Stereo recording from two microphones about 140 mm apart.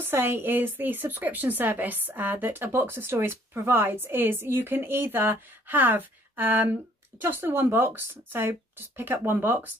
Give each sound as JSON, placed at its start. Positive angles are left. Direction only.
{"t": 0.0, "sound": "a woman's voice", "side_deg": -15}